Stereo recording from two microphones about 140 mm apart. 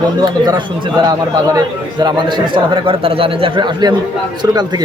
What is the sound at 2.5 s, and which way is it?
Speech, 35° right (ahead or behind).